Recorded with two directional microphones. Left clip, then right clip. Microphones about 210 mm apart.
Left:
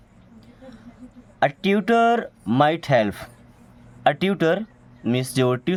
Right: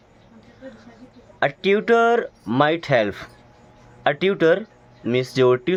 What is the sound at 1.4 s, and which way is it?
Speech, 30° left (ahead or behind).